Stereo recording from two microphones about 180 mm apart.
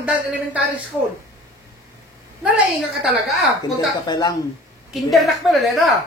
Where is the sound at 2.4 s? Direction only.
5° right (ahead or behind).